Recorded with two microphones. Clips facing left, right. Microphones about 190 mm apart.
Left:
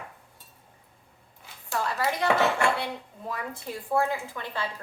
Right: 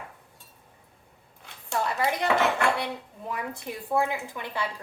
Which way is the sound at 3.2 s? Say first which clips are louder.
Right 1 dB; 15° right (ahead or behind).